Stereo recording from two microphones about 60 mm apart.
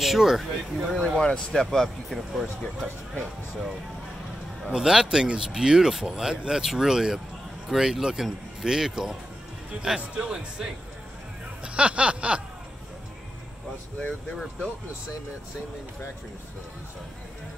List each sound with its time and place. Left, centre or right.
0.0 s speech: centre
0.9 s speech: centre
4.6 s speech: centre
11.6 s a sound: centre
14.3 s speech: centre